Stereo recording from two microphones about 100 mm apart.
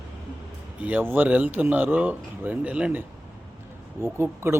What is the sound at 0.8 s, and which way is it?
Speech, 15° right (ahead or behind).